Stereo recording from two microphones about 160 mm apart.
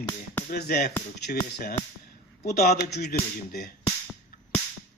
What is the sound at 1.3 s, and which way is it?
Speech, 65° left (ahead or behind).